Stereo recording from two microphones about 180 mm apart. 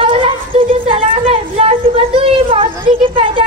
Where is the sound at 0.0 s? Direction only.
30° right (ahead or behind).